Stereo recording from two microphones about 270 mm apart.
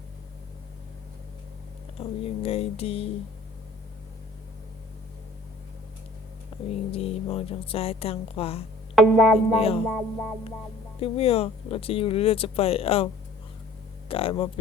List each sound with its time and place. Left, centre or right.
2.0 s speech: left
6.5 s a sound: left
6.9 s speech: left
9.0 s music: centre
9.6 s speech: left
9.9 s music: centre
11.0 s speech: left
14.1 s speech: centre